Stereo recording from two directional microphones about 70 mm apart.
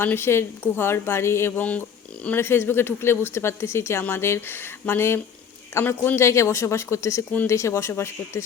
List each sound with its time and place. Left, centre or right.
0.0 s a woman's voice: left
1.5 s speech: left
2.3 s a woman's voice: left